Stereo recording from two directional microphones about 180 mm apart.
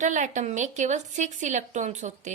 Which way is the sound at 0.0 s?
40° right (ahead or behind).